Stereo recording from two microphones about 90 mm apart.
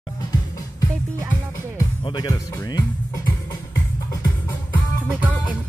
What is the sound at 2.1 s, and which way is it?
Speech, 50° left (ahead or behind).